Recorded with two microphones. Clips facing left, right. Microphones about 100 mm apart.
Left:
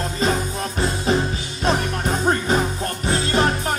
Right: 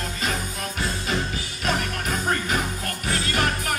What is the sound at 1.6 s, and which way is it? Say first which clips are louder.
Music: left 5 dB; 30° left (ahead or behind).